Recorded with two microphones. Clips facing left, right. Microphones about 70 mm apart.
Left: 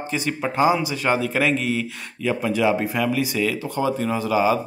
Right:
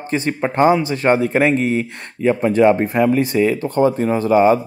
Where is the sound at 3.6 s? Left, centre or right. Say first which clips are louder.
Right 7 dB; right.